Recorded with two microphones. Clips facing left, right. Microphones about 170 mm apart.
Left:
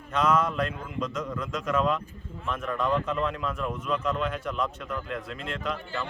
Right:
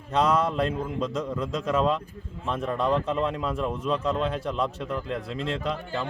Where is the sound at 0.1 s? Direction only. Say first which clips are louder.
Right 2 dB; 30° right (ahead or behind).